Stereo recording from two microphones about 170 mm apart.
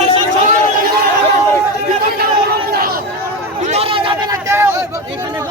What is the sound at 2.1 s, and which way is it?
Chatter, 65° right (ahead or behind).